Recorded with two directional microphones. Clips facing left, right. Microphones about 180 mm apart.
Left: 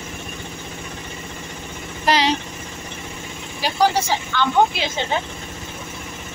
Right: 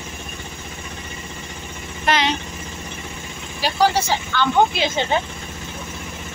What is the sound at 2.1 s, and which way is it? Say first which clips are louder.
Speech: left 2 dB; 35° left (ahead or behind).